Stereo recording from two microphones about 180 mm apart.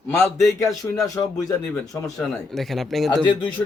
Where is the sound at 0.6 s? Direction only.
20° left (ahead or behind).